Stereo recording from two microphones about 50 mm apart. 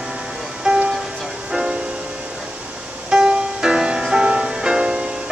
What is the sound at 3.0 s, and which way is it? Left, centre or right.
Music, centre.